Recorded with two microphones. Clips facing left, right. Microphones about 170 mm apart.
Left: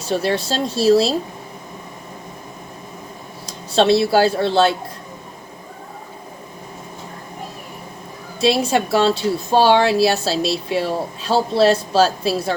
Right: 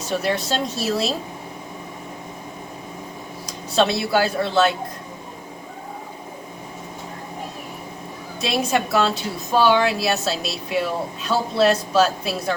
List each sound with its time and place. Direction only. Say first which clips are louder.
0.0 s speech: left 3 dB; 30° left (ahead or behind)
3.4 s speech: left 4 dB; 30° left (ahead or behind)
8.4 s speech: left 5 dB; 30° left (ahead or behind)